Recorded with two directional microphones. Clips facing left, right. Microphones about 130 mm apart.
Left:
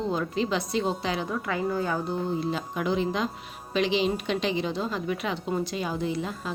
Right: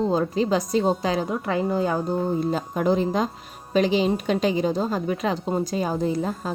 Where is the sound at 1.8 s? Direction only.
40° right (ahead or behind).